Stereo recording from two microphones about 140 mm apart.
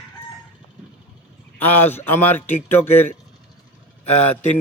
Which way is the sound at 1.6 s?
15° left (ahead or behind).